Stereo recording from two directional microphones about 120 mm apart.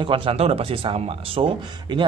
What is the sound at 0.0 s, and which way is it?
Speech, 45° right (ahead or behind).